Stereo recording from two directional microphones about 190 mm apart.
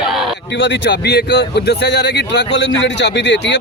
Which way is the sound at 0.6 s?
65° left (ahead or behind).